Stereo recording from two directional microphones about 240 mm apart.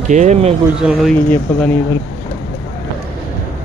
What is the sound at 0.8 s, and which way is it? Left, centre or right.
Speech, centre.